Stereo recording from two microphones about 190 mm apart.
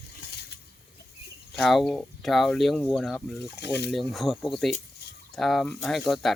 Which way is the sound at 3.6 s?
60° left (ahead or behind).